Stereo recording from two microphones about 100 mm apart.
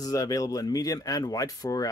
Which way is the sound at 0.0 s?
40° left (ahead or behind).